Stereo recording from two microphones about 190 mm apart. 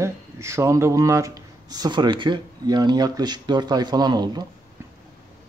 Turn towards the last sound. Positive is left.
turn(degrees=-20)  # may be behind; listen again after turning